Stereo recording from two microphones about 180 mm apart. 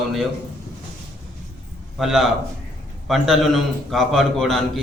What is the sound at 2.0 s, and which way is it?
A man's voice, centre (ahead or behind).